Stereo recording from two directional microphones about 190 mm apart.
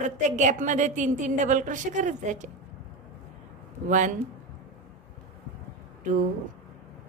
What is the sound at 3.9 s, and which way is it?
Speech, 40° right (ahead or behind).